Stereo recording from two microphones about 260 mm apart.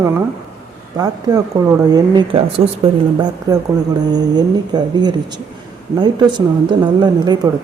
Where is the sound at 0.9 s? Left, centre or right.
Centre.